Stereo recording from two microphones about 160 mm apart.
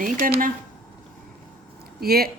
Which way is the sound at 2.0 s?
70° right (ahead or behind).